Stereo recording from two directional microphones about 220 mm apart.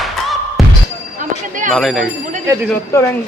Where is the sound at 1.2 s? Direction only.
35° right (ahead or behind).